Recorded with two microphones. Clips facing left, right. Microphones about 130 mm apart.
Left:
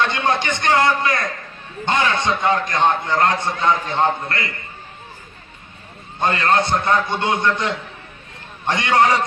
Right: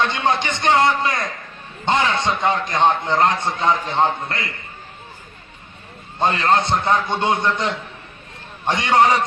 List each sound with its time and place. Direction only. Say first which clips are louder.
0.0 s a man's voice: even; 20° right (ahead or behind)
6.1 s a man's voice: even; 25° right (ahead or behind)
8.7 s a man's voice: right 1 dB; 25° right (ahead or behind)